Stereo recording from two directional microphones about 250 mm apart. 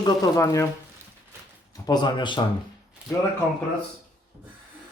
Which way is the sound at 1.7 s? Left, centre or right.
Centre.